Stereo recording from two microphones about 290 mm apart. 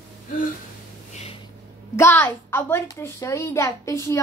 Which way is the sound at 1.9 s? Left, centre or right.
Centre.